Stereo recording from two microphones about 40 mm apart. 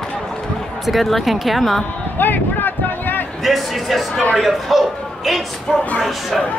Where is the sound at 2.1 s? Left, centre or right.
Left.